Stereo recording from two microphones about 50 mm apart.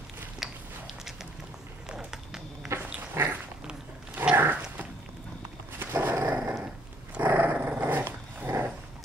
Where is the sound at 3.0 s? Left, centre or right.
Right.